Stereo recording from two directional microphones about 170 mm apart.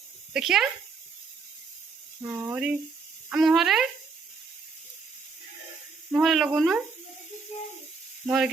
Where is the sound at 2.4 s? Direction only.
10° right (ahead or behind).